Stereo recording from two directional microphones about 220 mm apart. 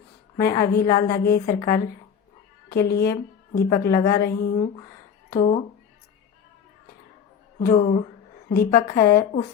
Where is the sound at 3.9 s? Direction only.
15° left (ahead or behind).